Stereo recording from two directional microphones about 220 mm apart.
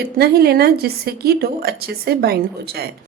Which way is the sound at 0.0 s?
45° right (ahead or behind).